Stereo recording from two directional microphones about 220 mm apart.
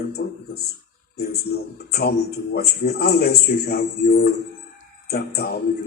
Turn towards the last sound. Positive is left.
turn(degrees=45)  # may be behind; listen again after turning